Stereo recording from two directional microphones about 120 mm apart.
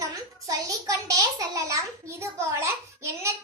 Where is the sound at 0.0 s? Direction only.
30° right (ahead or behind).